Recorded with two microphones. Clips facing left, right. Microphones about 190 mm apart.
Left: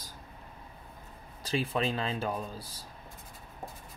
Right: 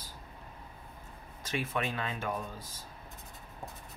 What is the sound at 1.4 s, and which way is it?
Speech, 30° left (ahead or behind).